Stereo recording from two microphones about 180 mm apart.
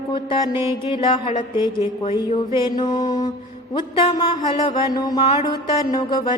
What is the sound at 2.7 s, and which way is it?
Music, 20° left (ahead or behind).